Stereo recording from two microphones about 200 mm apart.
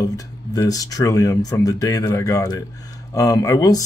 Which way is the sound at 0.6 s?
15° left (ahead or behind).